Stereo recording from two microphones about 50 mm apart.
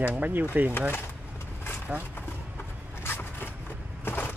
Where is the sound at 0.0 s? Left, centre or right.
Right.